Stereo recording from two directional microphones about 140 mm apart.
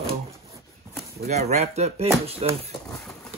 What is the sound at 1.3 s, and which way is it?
Speech, 50° right (ahead or behind).